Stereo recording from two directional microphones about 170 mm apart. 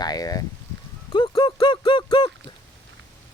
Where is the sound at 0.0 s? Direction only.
20° left (ahead or behind).